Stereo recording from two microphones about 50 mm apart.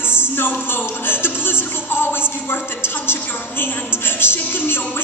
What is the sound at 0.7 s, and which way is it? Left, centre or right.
Music, left.